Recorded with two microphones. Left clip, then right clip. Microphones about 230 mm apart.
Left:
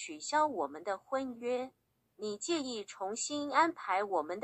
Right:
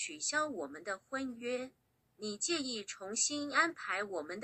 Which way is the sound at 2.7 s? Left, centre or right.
Right.